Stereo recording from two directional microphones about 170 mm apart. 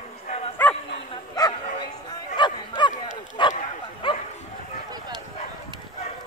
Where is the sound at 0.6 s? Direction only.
10° left (ahead or behind).